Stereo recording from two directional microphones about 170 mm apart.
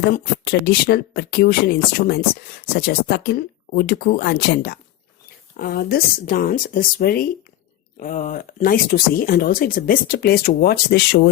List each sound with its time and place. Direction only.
0.6 s speech: 65° left (ahead or behind)
7.9 s speech: 50° left (ahead or behind); by 11.3 s 65° left (ahead or behind)